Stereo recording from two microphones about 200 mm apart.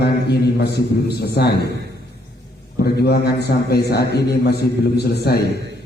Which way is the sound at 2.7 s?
55° left (ahead or behind).